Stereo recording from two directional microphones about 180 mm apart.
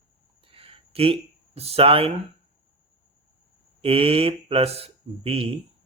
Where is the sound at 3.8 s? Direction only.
30° right (ahead or behind).